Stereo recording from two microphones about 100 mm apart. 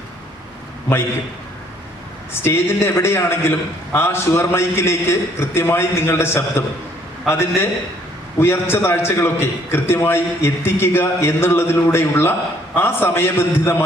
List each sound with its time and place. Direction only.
2.3 s a man's voice: 25° left (ahead or behind)